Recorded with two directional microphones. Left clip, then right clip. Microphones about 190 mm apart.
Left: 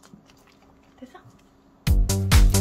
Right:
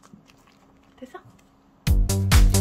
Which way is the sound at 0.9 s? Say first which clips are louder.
Right 4 dB; 60° right (ahead or behind).